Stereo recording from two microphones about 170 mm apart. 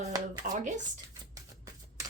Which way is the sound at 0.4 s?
50° right (ahead or behind).